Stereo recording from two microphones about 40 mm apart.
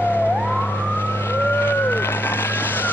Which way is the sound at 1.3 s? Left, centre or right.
Left.